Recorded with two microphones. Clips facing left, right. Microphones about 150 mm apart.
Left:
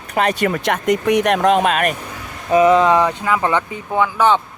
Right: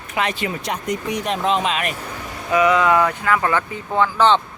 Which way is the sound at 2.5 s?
30° left (ahead or behind).